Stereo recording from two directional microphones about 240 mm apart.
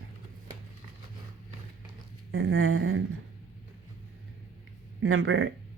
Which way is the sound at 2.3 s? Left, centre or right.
Right.